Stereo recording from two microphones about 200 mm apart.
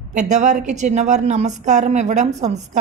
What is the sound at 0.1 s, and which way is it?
A woman's voice, 35° right (ahead or behind).